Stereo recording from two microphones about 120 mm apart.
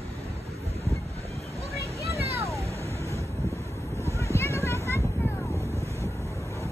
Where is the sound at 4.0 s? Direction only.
25° left (ahead or behind).